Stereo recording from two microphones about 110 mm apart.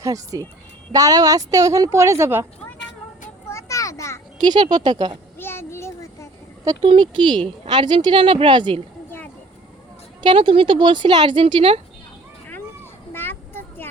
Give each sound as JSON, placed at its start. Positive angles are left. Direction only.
{"t": 0.0, "sound": "a woman's voice", "side_deg": -30}
{"t": 3.5, "sound": "children playing", "side_deg": 30}
{"t": 4.4, "sound": "a woman's voice", "side_deg": -40}
{"t": 5.4, "sound": "a sound", "side_deg": 20}
{"t": 6.8, "sound": "speech", "side_deg": -50}
{"t": 10.2, "sound": "speech", "side_deg": -50}
{"t": 13.1, "sound": "a sound", "side_deg": 20}